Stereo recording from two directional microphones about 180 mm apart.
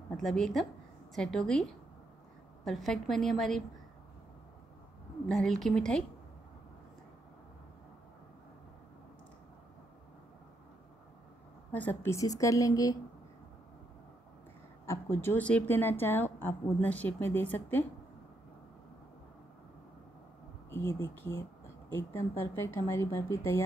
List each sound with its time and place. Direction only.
0.2 s a woman's voice: centre (ahead or behind)
5.3 s a woman's voice: centre (ahead or behind)
11.7 s a woman's voice: 10° left (ahead or behind)
14.9 s a woman's voice: 15° left (ahead or behind)
20.7 s a woman's voice: 15° left (ahead or behind)